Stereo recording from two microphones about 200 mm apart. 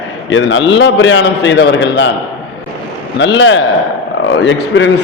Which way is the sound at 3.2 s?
65° left (ahead or behind).